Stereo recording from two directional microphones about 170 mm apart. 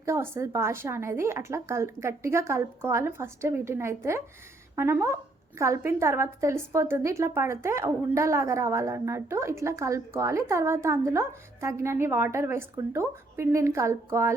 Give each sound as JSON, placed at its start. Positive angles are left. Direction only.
{"t": 0.0, "sound": "a woman's voice", "side_deg": -15}